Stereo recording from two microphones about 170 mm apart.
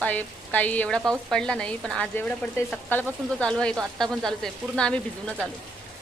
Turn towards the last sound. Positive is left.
turn(degrees=5)  # may be behind; listen again after turning